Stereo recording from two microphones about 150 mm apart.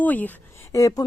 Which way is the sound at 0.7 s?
20° left (ahead or behind).